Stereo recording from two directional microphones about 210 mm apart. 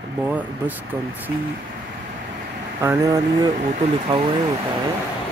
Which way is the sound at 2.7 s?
15° right (ahead or behind).